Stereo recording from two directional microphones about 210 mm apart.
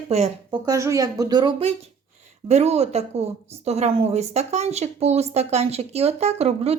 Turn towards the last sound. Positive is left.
turn(degrees=-30)  # may be behind; listen again after turning